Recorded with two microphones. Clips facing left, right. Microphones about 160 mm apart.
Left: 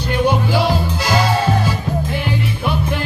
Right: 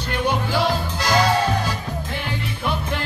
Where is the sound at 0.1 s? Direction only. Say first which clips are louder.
Left 5 dB; 10° left (ahead or behind).